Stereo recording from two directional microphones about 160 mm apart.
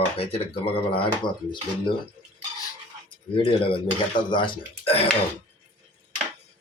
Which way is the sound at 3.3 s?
35° left (ahead or behind).